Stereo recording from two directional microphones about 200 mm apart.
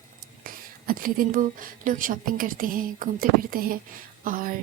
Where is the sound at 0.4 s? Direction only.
45° right (ahead or behind).